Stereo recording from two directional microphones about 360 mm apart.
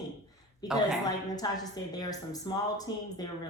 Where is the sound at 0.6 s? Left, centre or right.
Centre.